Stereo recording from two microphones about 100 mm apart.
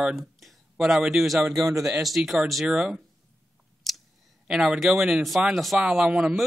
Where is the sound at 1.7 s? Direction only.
35° right (ahead or behind).